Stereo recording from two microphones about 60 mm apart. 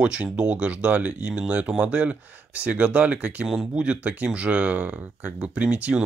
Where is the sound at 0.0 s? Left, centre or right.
Centre.